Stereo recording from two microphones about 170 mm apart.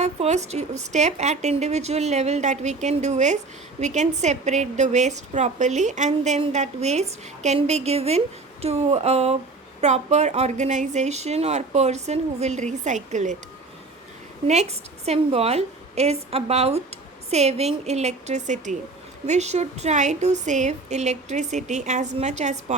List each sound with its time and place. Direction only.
0.0 s a sound: 40° right (ahead or behind)
0.4 s a woman's voice: 40° right (ahead or behind)
14.4 s a woman's voice: 40° right (ahead or behind)